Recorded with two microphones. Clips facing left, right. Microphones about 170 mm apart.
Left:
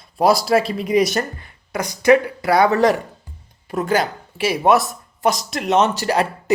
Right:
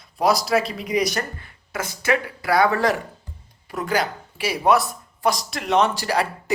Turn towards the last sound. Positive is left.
turn(degrees=20)  # may be behind; listen again after turning